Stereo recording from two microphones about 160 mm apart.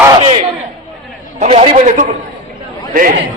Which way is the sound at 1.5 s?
40° right (ahead or behind).